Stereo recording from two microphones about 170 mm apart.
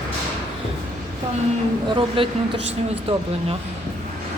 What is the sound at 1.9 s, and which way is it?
Speech, 30° right (ahead or behind).